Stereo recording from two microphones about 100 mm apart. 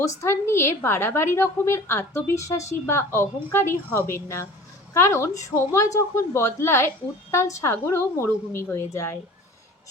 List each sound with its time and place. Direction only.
0.0 s a woman's voice: 30° left (ahead or behind)